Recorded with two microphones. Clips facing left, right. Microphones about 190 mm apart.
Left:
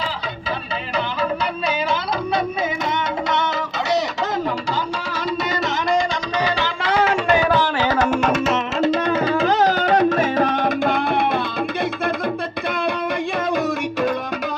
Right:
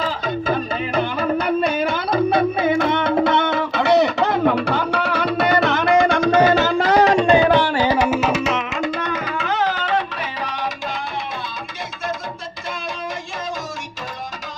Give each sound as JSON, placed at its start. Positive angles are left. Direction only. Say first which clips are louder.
{"t": 0.9, "sound": "music", "louder": "right 2 dB", "side_deg": -55}
{"t": 7.3, "sound": "tabla", "louder": "right 3 dB", "side_deg": -15}
{"t": 9.0, "sound": "music", "louder": "left 6 dB", "side_deg": 30}